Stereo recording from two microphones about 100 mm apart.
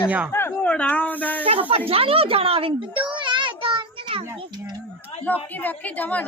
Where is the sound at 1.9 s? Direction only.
70° right (ahead or behind).